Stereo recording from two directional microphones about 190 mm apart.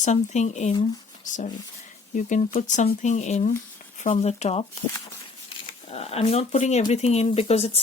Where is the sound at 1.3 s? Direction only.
40° left (ahead or behind).